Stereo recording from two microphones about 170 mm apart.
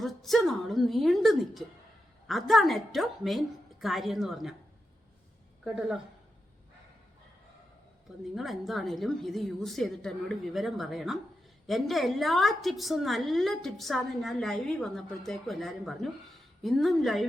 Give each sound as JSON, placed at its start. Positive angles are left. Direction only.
{"t": 0.0, "sound": "a woman's voice", "side_deg": 0}
{"t": 8.4, "sound": "a woman's voice", "side_deg": 0}